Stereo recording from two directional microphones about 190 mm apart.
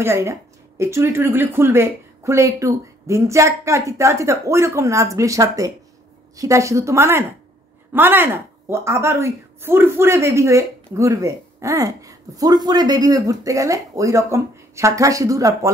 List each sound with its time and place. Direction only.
0.0 s a woman's voice: 15° right (ahead or behind)